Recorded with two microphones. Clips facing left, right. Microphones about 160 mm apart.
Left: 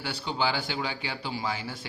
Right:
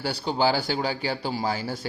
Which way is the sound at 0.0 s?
40° right (ahead or behind).